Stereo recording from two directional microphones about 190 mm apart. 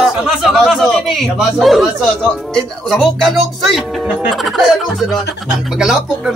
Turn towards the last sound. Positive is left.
turn(degrees=0)  # may be behind; listen again after turning